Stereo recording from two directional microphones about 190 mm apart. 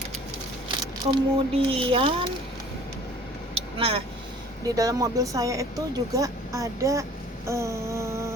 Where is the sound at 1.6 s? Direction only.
30° right (ahead or behind).